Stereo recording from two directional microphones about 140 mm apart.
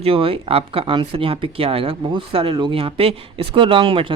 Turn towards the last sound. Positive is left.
turn(degrees=-40)  # may be behind; listen again after turning